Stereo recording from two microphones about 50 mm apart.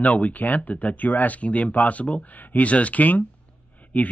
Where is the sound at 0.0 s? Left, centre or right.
Left.